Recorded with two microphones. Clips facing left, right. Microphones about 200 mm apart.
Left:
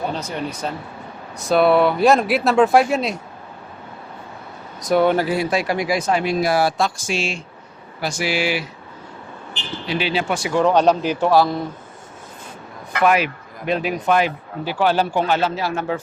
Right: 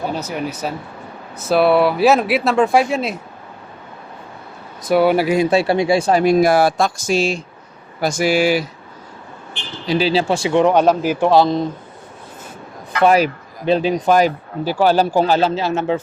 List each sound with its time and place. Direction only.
0.1 s speech: 5° right (ahead or behind)
4.8 s speech: 5° right (ahead or behind); by 8.6 s 40° right (ahead or behind)
9.8 s speech: 35° right (ahead or behind); by 11.3 s 5° right (ahead or behind)
11.3 s speech: 20° right (ahead or behind)
13.0 s speech: 35° right (ahead or behind)